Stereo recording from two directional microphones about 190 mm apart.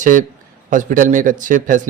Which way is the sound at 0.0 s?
40° right (ahead or behind).